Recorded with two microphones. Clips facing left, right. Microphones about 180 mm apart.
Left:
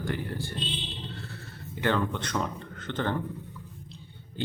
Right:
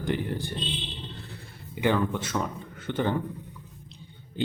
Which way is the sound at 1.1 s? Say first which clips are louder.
Left 1 dB; 15° right (ahead or behind).